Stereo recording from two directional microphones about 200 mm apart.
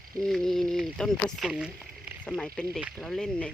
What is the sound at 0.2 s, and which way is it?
Speech, centre (ahead or behind).